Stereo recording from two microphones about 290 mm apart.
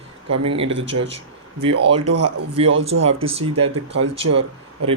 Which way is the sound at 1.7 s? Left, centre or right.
Right.